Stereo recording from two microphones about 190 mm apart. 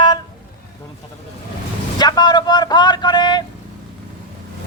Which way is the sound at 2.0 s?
20° left (ahead or behind).